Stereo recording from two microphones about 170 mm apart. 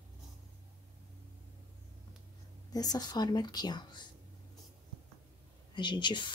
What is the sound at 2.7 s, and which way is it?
Speech, 20° left (ahead or behind).